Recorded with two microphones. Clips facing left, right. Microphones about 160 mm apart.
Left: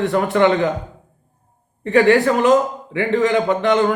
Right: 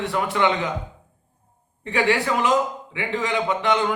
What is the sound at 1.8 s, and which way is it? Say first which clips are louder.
Speech: left 8 dB; 45° left (ahead or behind).